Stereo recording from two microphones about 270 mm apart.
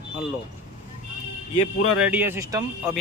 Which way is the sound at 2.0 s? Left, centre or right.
Centre.